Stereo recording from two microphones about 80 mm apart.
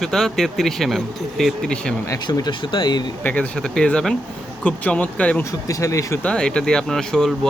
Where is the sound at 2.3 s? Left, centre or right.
Left.